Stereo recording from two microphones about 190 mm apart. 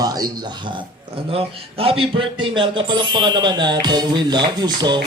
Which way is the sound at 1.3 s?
30° right (ahead or behind).